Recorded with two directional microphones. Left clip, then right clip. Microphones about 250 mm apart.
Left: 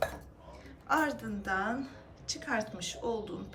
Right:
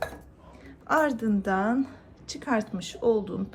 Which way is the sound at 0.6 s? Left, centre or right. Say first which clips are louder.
Right 6 dB; right.